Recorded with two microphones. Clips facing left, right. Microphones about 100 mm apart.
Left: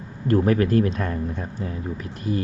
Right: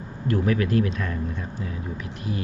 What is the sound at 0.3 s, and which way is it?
Speech, 40° left (ahead or behind).